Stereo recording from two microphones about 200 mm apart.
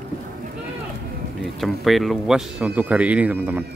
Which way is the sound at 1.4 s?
Centre (ahead or behind).